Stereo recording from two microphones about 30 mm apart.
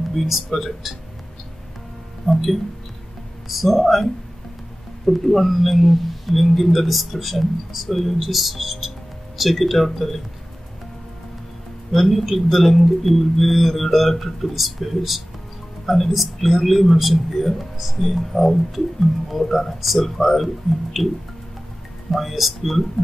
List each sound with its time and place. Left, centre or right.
0.6 s speech: centre
2.2 s speech: centre
11.9 s speech: centre
22.2 s speech: centre